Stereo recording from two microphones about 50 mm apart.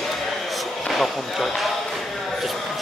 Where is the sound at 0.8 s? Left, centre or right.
Centre.